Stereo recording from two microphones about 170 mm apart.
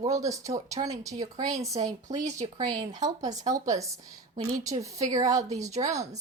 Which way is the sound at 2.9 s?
20° right (ahead or behind).